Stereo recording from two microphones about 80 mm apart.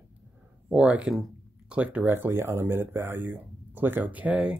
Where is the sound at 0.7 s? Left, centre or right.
Centre.